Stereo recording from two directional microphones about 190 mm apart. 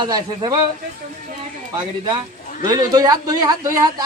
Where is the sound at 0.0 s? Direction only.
20° right (ahead or behind).